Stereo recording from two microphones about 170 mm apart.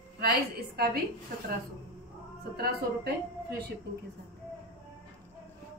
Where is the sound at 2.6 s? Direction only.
65° right (ahead or behind).